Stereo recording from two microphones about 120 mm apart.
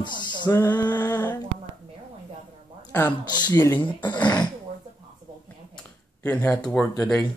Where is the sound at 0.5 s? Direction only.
20° left (ahead or behind).